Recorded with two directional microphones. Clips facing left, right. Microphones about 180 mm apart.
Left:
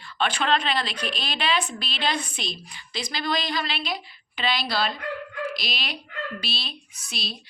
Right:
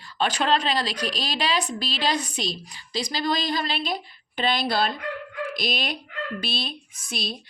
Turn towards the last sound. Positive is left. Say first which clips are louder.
# right 4 dB
turn(degrees=-50)  # may be behind; listen again after turning